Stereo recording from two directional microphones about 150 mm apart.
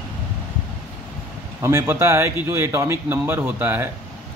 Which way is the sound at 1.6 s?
15° right (ahead or behind).